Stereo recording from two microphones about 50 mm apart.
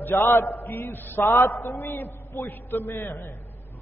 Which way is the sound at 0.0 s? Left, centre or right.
Left.